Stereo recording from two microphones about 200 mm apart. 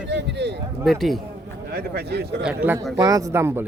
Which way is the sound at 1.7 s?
50° right (ahead or behind).